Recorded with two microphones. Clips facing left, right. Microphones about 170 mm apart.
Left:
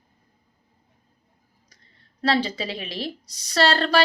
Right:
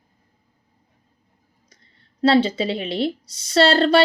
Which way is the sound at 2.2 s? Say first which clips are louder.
Right 7 dB; 25° right (ahead or behind).